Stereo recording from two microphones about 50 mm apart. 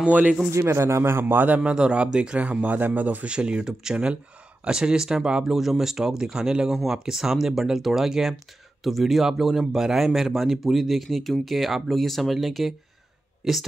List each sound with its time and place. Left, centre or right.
0.5 s a man's voice: right
1.4 s a man's voice: right
3.3 s a man's voice: centre
5.6 s speech: centre